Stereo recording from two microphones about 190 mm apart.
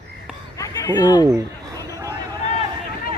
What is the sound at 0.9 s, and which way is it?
Speech, 20° left (ahead or behind).